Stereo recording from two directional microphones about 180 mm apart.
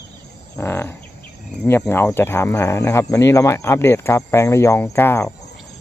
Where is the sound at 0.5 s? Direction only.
10° left (ahead or behind).